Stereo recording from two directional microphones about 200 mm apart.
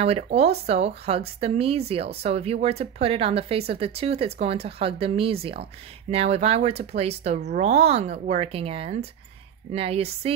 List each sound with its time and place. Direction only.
0.0 s speech: 30° right (ahead or behind)